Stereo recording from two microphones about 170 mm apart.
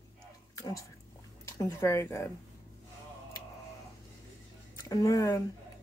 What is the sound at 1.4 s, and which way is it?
Speech, 15° left (ahead or behind).